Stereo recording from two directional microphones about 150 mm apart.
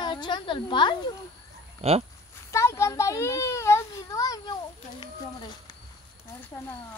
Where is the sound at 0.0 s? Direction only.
30° left (ahead or behind).